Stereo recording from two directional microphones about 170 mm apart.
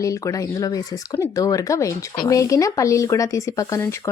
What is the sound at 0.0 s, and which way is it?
Speech, 20° left (ahead or behind).